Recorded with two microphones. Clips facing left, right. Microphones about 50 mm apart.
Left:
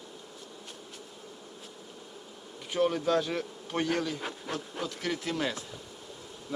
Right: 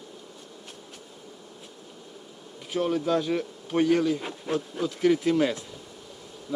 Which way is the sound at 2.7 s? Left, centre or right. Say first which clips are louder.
Right 2 dB; centre.